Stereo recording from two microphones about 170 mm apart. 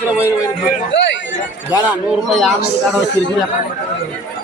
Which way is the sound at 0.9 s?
90° left.